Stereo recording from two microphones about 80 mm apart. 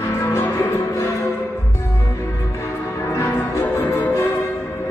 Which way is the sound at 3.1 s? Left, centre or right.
Left.